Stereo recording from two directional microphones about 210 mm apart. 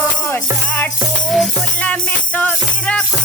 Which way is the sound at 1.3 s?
5° left (ahead or behind).